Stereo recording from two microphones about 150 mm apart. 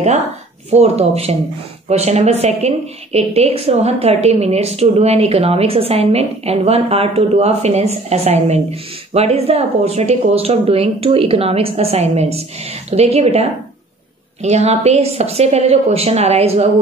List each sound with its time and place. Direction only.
0.7 s a woman's voice: 45° right (ahead or behind)